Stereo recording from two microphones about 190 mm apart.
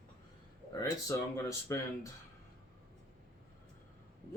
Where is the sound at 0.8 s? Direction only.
15° left (ahead or behind).